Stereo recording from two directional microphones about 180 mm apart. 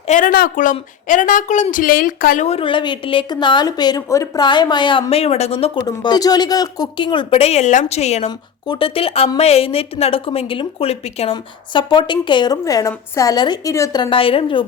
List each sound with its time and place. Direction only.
0.1 s a woman's voice: 50° left (ahead or behind)
2.5 s a woman's voice: 30° left (ahead or behind)
8.6 s a woman's voice: 25° left (ahead or behind)